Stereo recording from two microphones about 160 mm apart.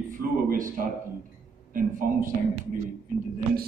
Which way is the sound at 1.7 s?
60° right (ahead or behind).